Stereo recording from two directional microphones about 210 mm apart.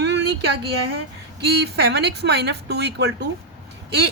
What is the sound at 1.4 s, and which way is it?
Speech, 50° right (ahead or behind).